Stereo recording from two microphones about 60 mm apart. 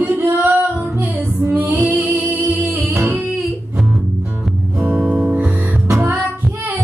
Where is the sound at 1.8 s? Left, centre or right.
Right.